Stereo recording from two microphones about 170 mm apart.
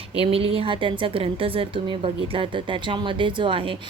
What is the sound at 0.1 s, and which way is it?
A woman's voice, 35° right (ahead or behind).